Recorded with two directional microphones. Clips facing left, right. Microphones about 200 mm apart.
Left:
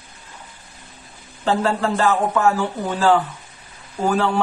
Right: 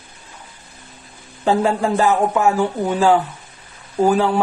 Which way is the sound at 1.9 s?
20° right (ahead or behind).